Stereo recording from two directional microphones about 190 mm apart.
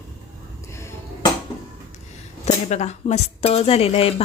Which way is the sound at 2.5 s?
35° left (ahead or behind).